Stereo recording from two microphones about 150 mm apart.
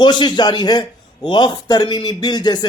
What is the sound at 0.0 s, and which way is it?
Speech, 30° left (ahead or behind).